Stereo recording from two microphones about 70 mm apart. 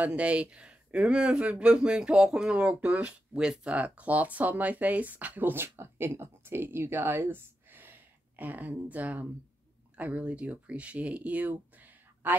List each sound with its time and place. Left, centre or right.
0.0 s speech: centre